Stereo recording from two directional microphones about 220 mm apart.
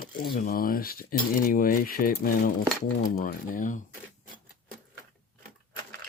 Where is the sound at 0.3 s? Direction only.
40° left (ahead or behind).